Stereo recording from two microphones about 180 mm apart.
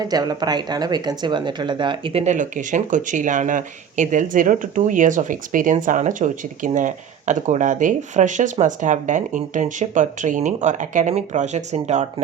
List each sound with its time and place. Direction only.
0.0 s speech: 20° right (ahead or behind); by 12.0 s 40° right (ahead or behind)